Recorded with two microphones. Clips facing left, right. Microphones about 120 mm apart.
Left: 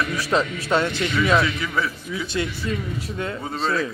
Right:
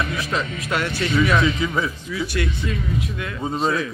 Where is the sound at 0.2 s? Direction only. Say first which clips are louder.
Left 3 dB; 30° left (ahead or behind).